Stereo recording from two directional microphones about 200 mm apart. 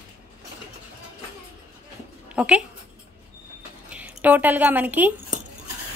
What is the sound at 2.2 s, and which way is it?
Speech, 5° right (ahead or behind).